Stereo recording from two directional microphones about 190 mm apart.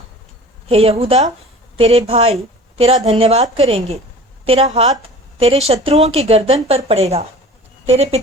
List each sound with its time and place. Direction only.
0.7 s speech: 30° right (ahead or behind)